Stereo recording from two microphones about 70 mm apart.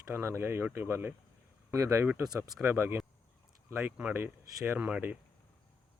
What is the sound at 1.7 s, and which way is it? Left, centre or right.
Speech, right.